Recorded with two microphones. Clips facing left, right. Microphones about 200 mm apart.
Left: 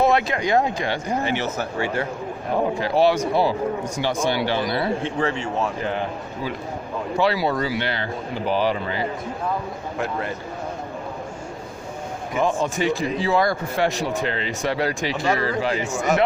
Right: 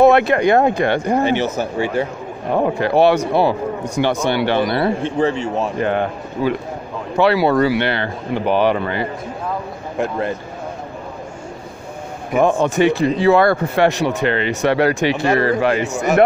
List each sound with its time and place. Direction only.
0.0 s speech: 60° right (ahead or behind)
1.2 s speech: 20° right (ahead or behind)
2.6 s speech: 60° right (ahead or behind)
12.4 s speech: 60° right (ahead or behind)